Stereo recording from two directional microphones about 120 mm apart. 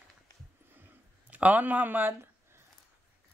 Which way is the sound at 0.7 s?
15° right (ahead or behind).